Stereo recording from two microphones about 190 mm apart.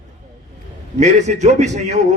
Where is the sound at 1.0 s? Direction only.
35° right (ahead or behind).